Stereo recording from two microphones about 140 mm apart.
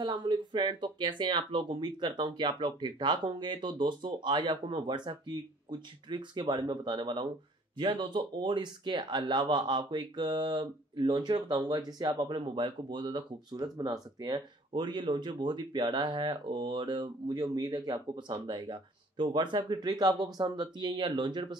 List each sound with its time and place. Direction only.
0.0 s speech: 35° right (ahead or behind)